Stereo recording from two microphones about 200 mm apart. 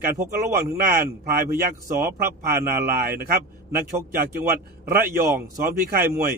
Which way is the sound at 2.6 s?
45° right (ahead or behind).